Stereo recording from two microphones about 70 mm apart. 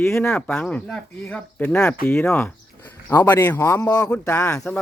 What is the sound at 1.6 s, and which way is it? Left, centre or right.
Speech, left.